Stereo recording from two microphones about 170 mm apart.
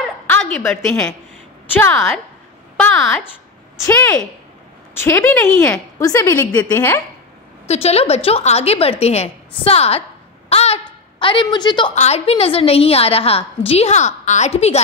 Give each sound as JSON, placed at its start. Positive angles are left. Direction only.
{"t": 0.3, "sound": "a woman's voice", "side_deg": 10}
{"t": 4.9, "sound": "a woman's voice", "side_deg": 15}
{"t": 7.6, "sound": "a woman's voice", "side_deg": 40}
{"t": 10.5, "sound": "a sound", "side_deg": 35}
{"t": 11.9, "sound": "a woman's voice", "side_deg": 40}